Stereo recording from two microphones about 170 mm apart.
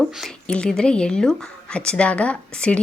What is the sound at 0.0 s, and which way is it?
A woman's voice, 5° left (ahead or behind).